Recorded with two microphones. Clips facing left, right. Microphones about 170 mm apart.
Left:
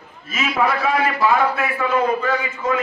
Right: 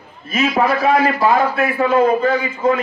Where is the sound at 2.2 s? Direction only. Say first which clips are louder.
Right 5 dB; 35° right (ahead or behind).